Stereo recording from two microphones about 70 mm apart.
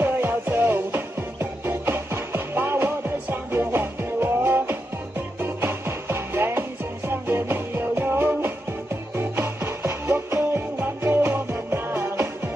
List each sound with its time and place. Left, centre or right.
0.0 s music: right